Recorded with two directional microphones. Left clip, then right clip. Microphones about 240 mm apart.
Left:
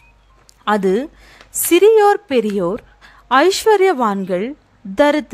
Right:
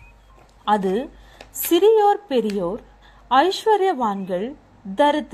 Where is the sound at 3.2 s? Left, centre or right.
Left.